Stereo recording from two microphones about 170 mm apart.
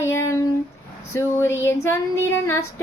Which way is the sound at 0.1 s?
15° left (ahead or behind).